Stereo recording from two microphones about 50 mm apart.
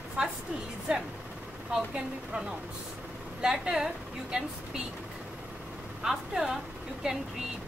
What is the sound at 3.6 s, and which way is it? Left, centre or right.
Speech, centre.